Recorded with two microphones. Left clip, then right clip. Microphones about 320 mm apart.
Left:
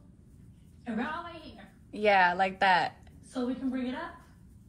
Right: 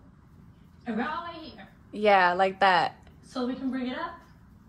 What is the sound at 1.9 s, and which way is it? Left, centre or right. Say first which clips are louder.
A woman's voice: right 3 dB; centre.